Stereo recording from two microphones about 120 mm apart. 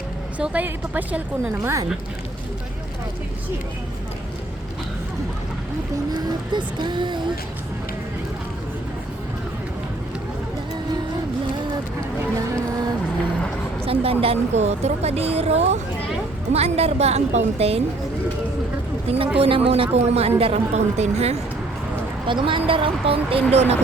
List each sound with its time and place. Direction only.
0.3 s a woman's voice: 10° right (ahead or behind)
6.1 s speech: 40° right (ahead or behind)
13.8 s a woman's voice: 55° right (ahead or behind)
19.0 s a woman's voice: 55° right (ahead or behind)
22.3 s speech: 45° right (ahead or behind); by 23.7 s 60° right (ahead or behind)